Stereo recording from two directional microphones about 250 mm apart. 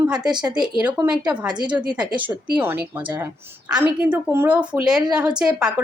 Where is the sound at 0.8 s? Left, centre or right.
Centre.